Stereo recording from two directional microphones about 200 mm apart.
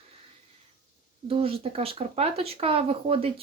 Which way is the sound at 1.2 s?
30° right (ahead or behind).